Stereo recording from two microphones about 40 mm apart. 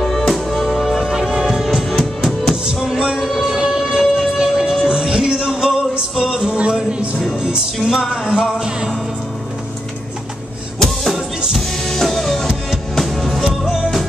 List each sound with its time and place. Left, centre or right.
0.0 s music: centre
1.1 s music: centre
2.0 s music: centre
2.5 s music: centre
3.2 s music: centre
3.6 s music: right
7.3 s music: centre
11.5 s music: centre
13.5 s music: centre